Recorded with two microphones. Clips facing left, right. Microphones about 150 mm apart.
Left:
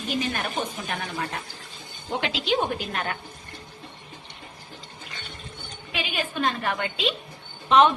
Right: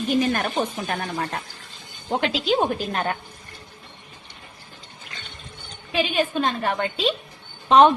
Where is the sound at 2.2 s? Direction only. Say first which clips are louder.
Right 4 dB; 40° right (ahead or behind).